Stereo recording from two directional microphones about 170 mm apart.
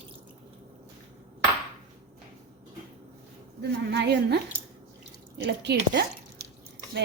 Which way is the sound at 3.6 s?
85° right.